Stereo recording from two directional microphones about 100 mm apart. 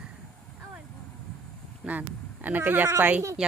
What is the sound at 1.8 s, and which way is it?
Speech, 15° right (ahead or behind).